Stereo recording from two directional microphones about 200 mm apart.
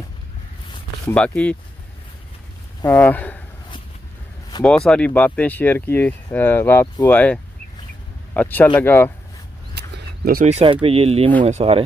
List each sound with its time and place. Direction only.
1.0 s speech: 5° left (ahead or behind)
2.8 s speech: 10° left (ahead or behind)
4.6 s speech: 5° left (ahead or behind)
8.4 s speech: 10° left (ahead or behind)
9.8 s a sound: 50° right (ahead or behind)
10.4 s speech: 30° right (ahead or behind)